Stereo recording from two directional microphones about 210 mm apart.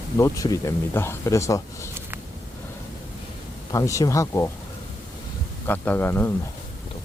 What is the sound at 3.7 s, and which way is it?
Speech, 15° left (ahead or behind).